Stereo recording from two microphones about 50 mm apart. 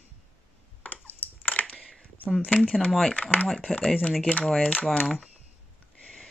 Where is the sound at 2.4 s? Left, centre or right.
Left.